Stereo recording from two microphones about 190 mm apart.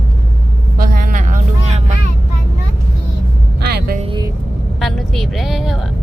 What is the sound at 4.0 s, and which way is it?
Vehicle, 25° right (ahead or behind).